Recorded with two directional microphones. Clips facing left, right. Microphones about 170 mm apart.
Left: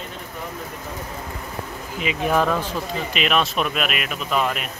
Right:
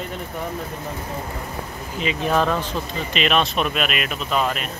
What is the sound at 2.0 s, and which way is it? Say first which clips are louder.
Speech: even; 10° left (ahead or behind).